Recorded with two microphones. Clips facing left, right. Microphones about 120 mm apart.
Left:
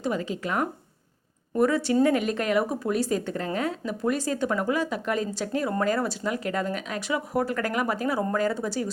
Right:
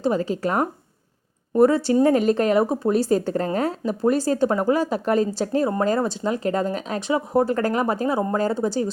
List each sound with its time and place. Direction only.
0.0 s speech: 35° right (ahead or behind)